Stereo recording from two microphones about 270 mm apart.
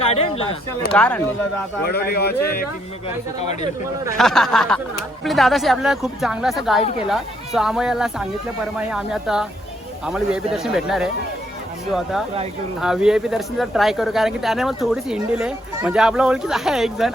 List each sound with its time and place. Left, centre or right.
0.1 s speech: left
0.9 s speech: centre
1.8 s speech: left
3.4 s speech: left
4.2 s speech: centre